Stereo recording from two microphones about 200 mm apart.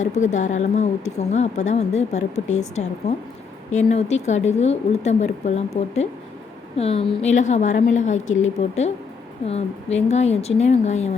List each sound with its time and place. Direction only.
0.0 s speech: 35° left (ahead or behind)